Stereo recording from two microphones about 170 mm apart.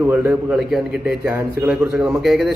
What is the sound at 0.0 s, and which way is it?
A man's voice, 10° right (ahead or behind).